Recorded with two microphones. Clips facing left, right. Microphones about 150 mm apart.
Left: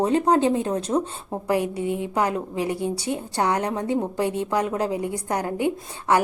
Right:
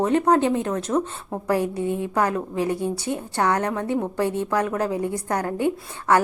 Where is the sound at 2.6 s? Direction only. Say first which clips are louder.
Right 2 dB; 30° right (ahead or behind).